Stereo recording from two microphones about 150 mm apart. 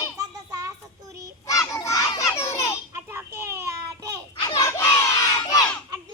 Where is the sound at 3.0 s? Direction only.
15° right (ahead or behind).